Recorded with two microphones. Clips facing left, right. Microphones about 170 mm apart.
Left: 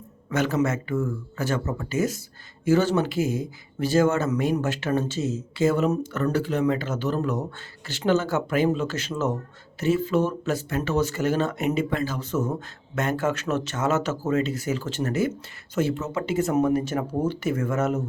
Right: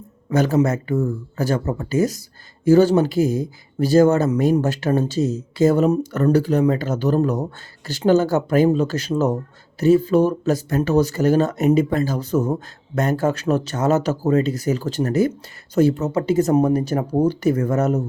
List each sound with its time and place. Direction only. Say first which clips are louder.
0.3 s speech: right 6 dB; 35° right (ahead or behind)